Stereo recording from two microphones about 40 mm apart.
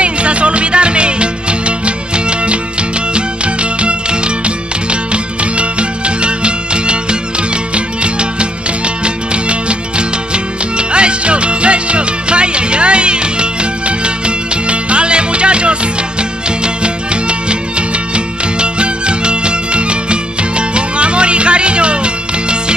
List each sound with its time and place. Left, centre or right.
0.0 s music: right